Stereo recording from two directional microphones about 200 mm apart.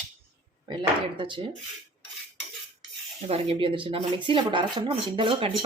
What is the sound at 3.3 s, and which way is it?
Speech, 30° right (ahead or behind).